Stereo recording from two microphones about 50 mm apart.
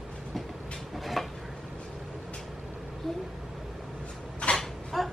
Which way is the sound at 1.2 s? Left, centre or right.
Centre.